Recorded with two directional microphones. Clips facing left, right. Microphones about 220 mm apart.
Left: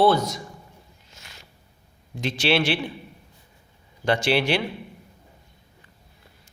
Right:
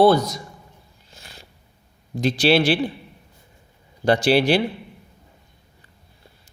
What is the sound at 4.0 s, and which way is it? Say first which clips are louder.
Speech: right 5 dB; 35° right (ahead or behind).